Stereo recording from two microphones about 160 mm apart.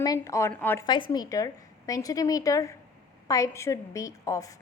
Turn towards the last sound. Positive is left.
turn(degrees=20)  # may be behind; listen again after turning